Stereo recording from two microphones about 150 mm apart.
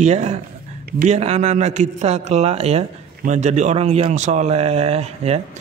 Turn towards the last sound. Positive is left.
turn(degrees=-45)  # may be behind; listen again after turning